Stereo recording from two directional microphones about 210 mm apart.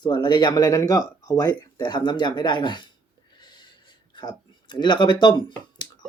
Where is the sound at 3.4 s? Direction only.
20° left (ahead or behind).